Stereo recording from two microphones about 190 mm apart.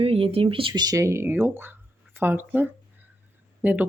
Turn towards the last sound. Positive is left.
turn(degrees=-10)  # may be behind; listen again after turning